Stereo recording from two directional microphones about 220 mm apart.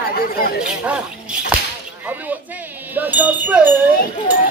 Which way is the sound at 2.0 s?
5° right (ahead or behind).